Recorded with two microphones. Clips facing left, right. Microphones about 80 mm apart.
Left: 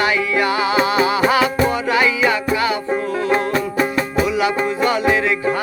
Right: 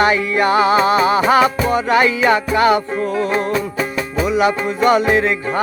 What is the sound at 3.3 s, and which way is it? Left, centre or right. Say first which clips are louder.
Music: even; left.